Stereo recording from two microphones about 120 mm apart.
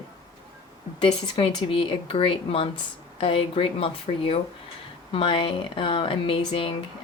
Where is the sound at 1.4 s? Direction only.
50° left (ahead or behind).